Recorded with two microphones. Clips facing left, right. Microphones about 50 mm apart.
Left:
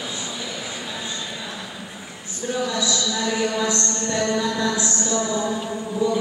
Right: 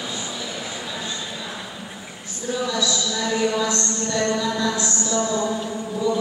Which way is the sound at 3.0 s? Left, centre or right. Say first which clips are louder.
Right 1 dB; centre.